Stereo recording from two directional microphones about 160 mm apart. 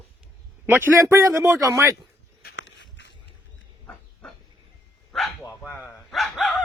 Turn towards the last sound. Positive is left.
turn(degrees=0)  # may be behind; listen again after turning